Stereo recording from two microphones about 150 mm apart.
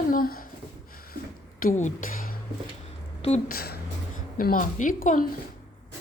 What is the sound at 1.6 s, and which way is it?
Speech, 60° left (ahead or behind).